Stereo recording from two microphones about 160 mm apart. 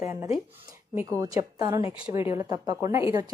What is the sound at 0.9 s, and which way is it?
A woman's voice, 20° right (ahead or behind).